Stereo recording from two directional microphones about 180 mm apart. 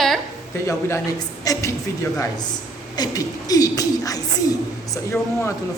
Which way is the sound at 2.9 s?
20° left (ahead or behind).